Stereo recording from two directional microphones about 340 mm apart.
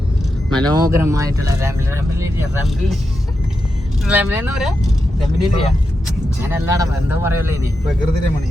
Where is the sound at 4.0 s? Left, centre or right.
Centre.